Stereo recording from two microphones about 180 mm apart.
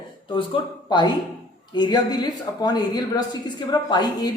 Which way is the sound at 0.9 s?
25° left (ahead or behind).